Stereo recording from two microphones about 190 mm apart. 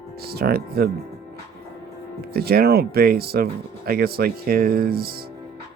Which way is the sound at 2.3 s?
55° right (ahead or behind).